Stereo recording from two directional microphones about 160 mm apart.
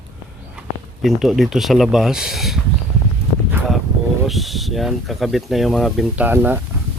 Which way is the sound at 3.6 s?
15° right (ahead or behind).